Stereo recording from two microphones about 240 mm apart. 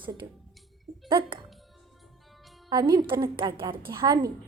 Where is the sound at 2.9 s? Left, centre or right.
Centre.